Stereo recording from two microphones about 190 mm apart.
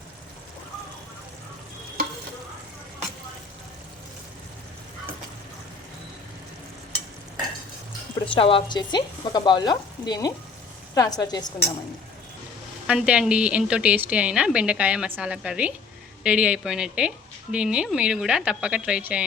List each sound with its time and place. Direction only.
8.3 s speech: 30° left (ahead or behind)
12.9 s a woman's voice: 5° right (ahead or behind)